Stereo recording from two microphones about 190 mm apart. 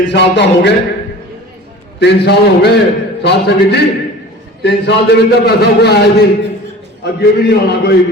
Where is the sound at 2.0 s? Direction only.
60° left (ahead or behind).